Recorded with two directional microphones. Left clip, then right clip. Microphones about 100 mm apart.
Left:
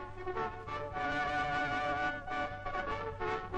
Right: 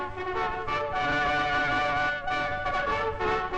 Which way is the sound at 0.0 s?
30° left (ahead or behind).